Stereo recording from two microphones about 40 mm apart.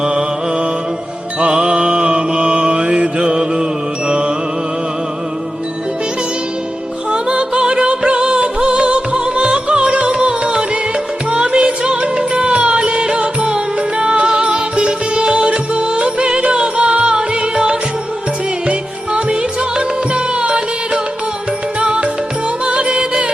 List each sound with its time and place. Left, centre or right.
0.0 s music: centre
1.4 s mantra: right
7.1 s music: right